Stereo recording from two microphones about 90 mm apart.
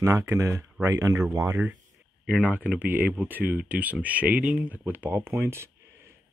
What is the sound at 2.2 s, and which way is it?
Speech, 15° right (ahead or behind).